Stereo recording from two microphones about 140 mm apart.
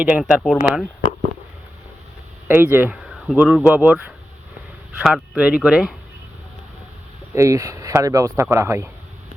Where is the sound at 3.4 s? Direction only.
Centre (ahead or behind).